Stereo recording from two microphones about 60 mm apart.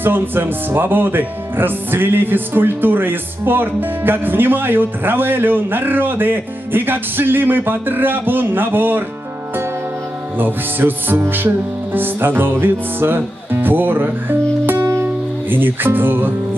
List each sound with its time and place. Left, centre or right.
0.0 s speech: right
10.3 s speech: right
14.7 s music: right
15.5 s speech: right